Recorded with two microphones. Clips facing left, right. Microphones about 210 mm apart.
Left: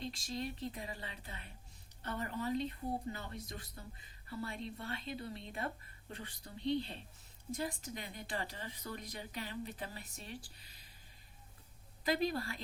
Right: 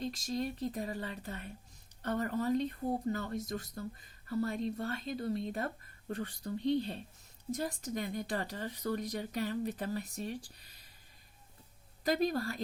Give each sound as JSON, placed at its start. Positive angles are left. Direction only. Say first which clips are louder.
{"t": 0.0, "sound": "speech", "louder": "right 5 dB", "side_deg": -45}
{"t": 12.0, "sound": "speech", "louder": "right 4 dB", "side_deg": -45}